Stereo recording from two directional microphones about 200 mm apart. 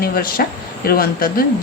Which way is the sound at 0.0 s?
50° left (ahead or behind).